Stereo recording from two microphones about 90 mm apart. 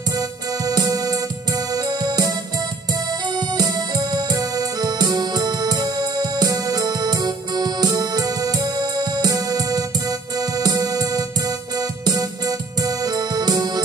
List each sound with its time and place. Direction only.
0.7 s music: 45° right (ahead or behind)
3.3 s music: 45° right (ahead or behind)